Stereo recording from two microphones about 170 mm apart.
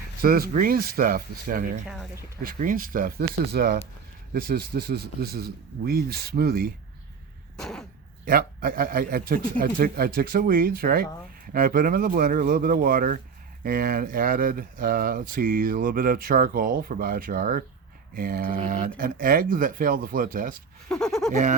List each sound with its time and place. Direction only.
0.2 s speech: 60° right (ahead or behind)
7.5 s a sound: 5° left (ahead or behind)
8.2 s speech: 60° right (ahead or behind)
20.9 s speech: 5° left (ahead or behind)